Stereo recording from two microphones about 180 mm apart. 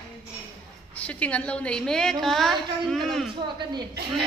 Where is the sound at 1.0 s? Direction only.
10° left (ahead or behind).